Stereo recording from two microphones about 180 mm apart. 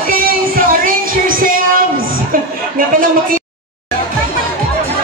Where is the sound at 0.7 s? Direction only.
50° right (ahead or behind).